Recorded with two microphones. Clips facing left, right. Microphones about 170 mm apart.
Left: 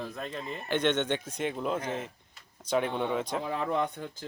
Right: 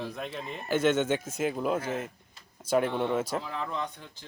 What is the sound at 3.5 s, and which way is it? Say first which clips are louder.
Speech: left 5 dB; 55° left (ahead or behind).